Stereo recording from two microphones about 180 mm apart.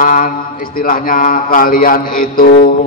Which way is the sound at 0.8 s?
50° left (ahead or behind).